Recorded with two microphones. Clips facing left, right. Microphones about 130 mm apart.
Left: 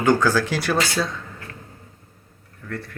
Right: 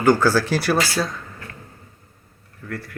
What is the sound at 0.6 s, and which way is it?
Speech, 10° right (ahead or behind).